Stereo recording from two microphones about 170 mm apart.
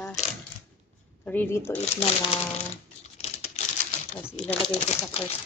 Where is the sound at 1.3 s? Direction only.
10° left (ahead or behind).